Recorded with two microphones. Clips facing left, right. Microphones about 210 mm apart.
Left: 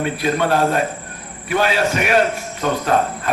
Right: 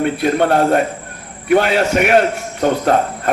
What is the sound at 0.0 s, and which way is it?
A man's voice, 60° right (ahead or behind).